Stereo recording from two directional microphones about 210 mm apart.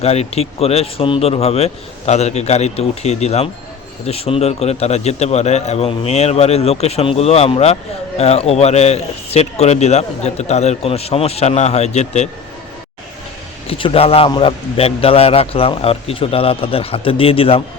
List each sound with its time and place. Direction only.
0.0 s a man's voice: 30° left (ahead or behind)
13.7 s a man's voice: 25° left (ahead or behind)